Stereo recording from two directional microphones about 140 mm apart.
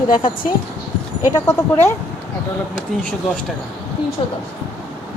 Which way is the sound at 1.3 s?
25° left (ahead or behind).